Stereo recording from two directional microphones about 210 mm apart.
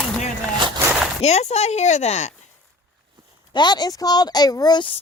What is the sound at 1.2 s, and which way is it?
Speech, 30° left (ahead or behind).